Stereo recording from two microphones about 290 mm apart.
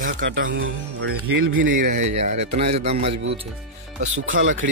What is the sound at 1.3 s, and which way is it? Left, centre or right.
Speech, right.